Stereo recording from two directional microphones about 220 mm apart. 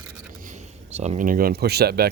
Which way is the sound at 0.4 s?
30° right (ahead or behind).